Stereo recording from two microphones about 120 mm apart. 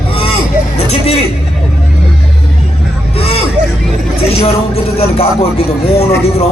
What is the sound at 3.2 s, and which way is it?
Hubbub, 55° left (ahead or behind).